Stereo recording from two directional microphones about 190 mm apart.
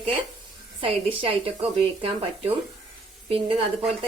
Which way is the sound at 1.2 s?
30° right (ahead or behind).